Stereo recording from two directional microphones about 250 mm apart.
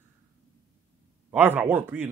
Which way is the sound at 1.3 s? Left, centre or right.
Centre.